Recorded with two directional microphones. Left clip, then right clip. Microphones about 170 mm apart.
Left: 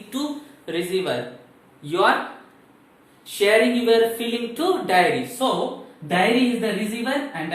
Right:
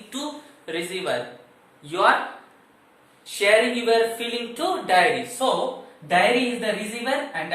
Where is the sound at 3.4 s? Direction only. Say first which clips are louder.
Left 1 dB; 10° left (ahead or behind).